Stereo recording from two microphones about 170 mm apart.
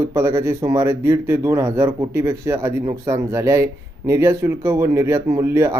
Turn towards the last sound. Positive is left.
turn(degrees=-15)  # may be behind; listen again after turning